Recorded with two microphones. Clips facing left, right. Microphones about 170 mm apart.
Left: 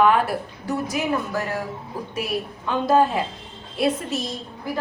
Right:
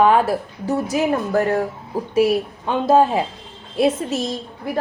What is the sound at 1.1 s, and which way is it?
Speech, 50° right (ahead or behind).